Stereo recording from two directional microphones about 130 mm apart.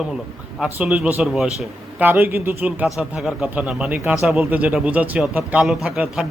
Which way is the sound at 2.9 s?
Centre (ahead or behind).